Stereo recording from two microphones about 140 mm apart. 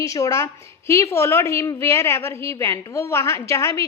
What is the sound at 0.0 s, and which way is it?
A woman's voice, 25° left (ahead or behind).